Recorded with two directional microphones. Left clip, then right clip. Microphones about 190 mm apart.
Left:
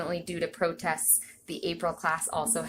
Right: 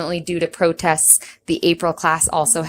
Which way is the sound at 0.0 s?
50° right (ahead or behind).